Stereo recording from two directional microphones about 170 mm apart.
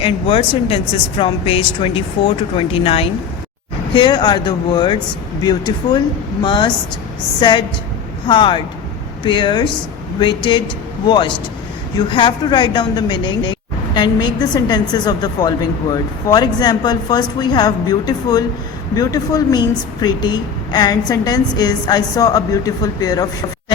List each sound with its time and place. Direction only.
0.0 s a woman's voice: 30° left (ahead or behind)